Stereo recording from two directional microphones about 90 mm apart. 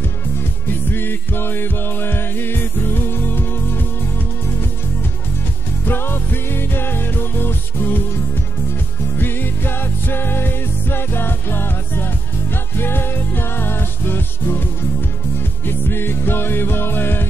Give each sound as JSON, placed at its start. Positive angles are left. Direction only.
{"t": 0.9, "sound": "music", "side_deg": 25}
{"t": 5.9, "sound": "music", "side_deg": 25}
{"t": 9.2, "sound": "music", "side_deg": 25}